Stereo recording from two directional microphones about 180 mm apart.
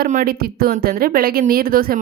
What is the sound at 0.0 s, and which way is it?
A woman's voice, 50° right (ahead or behind).